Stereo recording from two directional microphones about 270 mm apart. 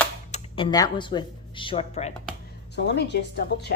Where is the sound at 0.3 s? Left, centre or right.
Left.